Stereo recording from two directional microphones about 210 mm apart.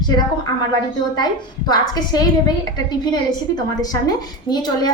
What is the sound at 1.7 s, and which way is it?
A woman's voice, 20° left (ahead or behind).